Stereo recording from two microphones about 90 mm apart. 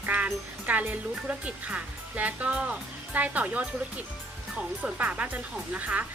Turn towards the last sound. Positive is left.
turn(degrees=-20)  # may be behind; listen again after turning